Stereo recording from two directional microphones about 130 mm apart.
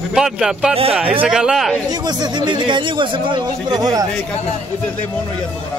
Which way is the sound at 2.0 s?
35° right (ahead or behind).